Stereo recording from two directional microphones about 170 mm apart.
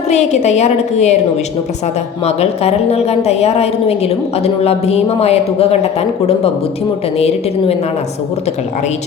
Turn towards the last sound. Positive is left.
turn(degrees=35)  # may be behind; listen again after turning